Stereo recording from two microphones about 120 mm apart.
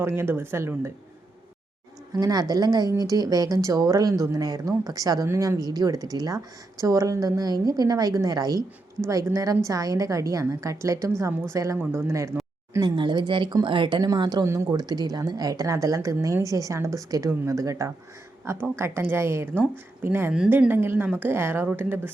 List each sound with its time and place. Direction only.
0.0 s a woman's voice: 20° right (ahead or behind)
2.1 s a woman's voice: 30° right (ahead or behind)
12.8 s a woman's voice: 40° right (ahead or behind)
14.4 s a woman's voice: 25° right (ahead or behind)